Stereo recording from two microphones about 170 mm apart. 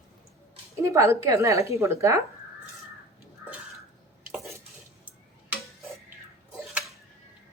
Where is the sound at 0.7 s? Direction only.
20° right (ahead or behind).